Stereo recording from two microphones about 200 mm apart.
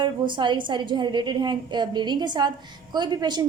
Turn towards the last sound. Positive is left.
turn(degrees=-20)  # may be behind; listen again after turning